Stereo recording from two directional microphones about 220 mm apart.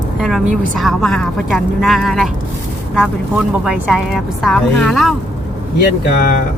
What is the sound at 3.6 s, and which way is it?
Speech, 5° right (ahead or behind).